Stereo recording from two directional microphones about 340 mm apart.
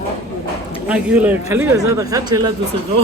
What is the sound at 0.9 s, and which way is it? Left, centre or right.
Speech, centre.